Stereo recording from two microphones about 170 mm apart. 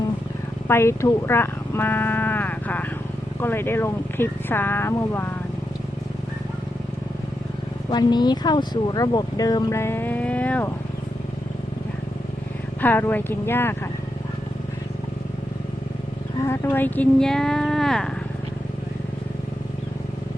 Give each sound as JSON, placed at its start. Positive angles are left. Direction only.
{"t": 0.7, "sound": "speech", "side_deg": 15}
{"t": 7.9, "sound": "speech", "side_deg": 25}
{"t": 12.8, "sound": "speech", "side_deg": 10}
{"t": 16.5, "sound": "speech", "side_deg": 10}